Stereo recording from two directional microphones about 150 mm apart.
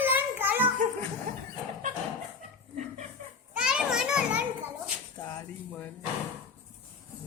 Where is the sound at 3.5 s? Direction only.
5° right (ahead or behind).